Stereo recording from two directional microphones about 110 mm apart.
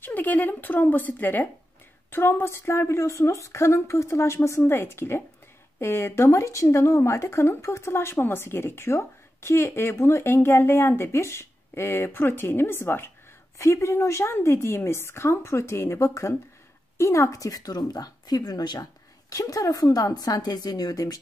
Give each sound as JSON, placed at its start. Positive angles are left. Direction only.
{"t": 0.0, "sound": "speech", "side_deg": 15}